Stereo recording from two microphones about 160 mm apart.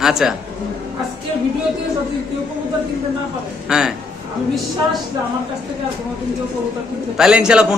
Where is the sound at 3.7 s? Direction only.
5° right (ahead or behind).